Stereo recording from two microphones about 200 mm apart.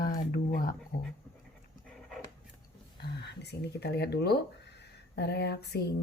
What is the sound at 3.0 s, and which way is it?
Speech, 55° left (ahead or behind).